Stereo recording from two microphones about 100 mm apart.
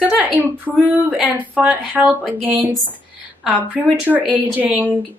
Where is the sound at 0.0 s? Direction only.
15° right (ahead or behind).